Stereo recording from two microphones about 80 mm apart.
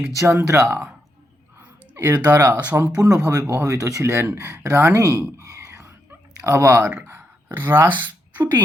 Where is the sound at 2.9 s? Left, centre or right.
Right.